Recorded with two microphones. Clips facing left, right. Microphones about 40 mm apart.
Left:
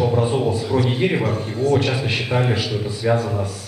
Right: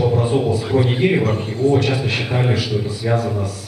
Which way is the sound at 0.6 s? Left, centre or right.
Centre.